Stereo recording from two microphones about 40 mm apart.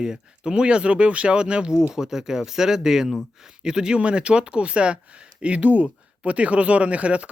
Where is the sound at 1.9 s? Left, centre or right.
Centre; by 7.3 s right.